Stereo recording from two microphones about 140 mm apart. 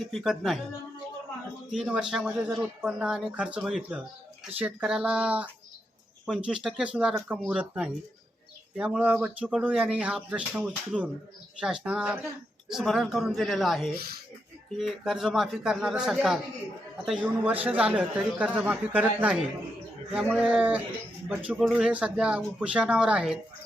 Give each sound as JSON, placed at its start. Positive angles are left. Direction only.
{"t": 0.1, "sound": "speech", "side_deg": 0}
{"t": 1.7, "sound": "a man's voice", "side_deg": -5}